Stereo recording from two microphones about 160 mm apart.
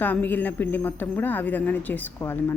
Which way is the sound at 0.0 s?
10° left (ahead or behind).